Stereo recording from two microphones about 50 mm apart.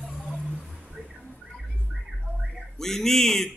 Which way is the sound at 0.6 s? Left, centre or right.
Centre.